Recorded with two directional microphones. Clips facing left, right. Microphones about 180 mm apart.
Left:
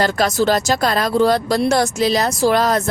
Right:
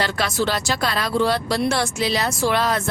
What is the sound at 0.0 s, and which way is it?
Speech, 40° left (ahead or behind).